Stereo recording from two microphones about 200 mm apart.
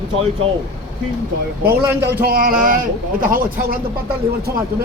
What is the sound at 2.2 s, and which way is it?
A man's voice, 45° right (ahead or behind).